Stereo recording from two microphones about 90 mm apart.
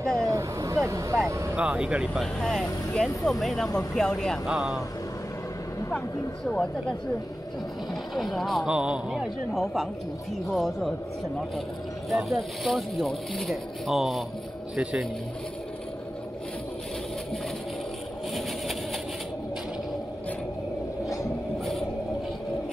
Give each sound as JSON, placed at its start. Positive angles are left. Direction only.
{"t": 0.2, "sound": "vehicle", "side_deg": -35}
{"t": 1.6, "sound": "speech", "side_deg": -10}
{"t": 2.4, "sound": "speech", "side_deg": 5}
{"t": 4.5, "sound": "speech", "side_deg": -10}
{"t": 5.9, "sound": "speech", "side_deg": 10}
{"t": 7.9, "sound": "speech", "side_deg": 0}
{"t": 8.6, "sound": "speech", "side_deg": -10}
{"t": 9.5, "sound": "speech", "side_deg": 0}
{"t": 12.1, "sound": "speech", "side_deg": 0}
{"t": 14.8, "sound": "speech", "side_deg": -15}